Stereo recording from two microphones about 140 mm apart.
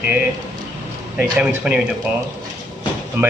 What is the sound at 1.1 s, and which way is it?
Speech, 5° right (ahead or behind).